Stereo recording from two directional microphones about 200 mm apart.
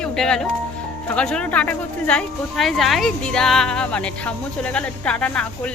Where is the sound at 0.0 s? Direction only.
5° left (ahead or behind).